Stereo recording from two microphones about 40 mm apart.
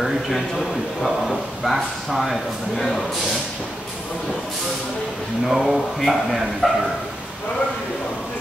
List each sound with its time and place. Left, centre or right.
1.0 s speech: centre
5.5 s speech: centre